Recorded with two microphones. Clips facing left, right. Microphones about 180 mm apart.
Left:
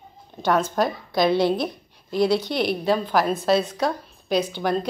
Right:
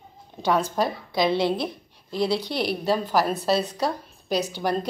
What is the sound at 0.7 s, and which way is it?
Speech, centre (ahead or behind).